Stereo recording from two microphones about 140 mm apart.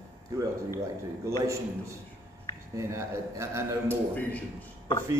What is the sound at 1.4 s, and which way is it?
A man's voice, 20° right (ahead or behind).